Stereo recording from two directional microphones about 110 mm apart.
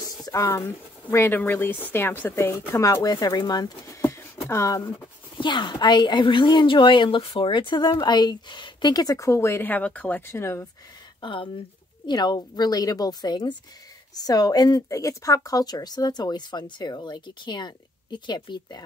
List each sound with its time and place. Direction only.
0.0 s speech: 30° left (ahead or behind)
4.0 s a sound: 25° left (ahead or behind)
5.4 s a woman's voice: 45° left (ahead or behind); by 10.3 s 15° left (ahead or behind)
10.3 s speech: 25° left (ahead or behind)
11.1 s speech: 50° left (ahead or behind)
12.1 s speech: 40° left (ahead or behind)